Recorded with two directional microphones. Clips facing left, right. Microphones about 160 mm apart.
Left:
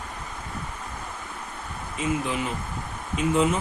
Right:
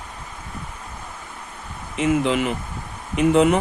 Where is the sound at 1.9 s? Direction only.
75° right (ahead or behind).